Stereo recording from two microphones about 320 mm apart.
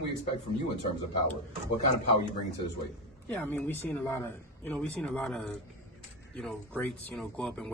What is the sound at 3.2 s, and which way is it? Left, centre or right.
Speech, centre.